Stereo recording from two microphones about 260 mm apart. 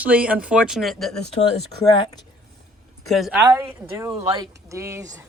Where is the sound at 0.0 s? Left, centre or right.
Centre.